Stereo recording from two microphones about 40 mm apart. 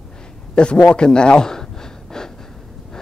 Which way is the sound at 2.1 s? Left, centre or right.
Centre.